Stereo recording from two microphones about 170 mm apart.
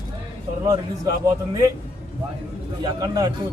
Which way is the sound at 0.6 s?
20° right (ahead or behind).